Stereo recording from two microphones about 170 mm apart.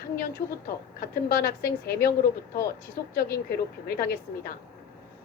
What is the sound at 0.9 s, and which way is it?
Speech, 60° left (ahead or behind).